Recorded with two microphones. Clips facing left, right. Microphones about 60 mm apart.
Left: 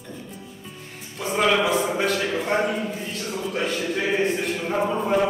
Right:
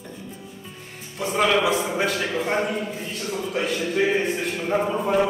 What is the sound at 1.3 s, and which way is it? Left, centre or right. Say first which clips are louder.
A man's voice: even; centre.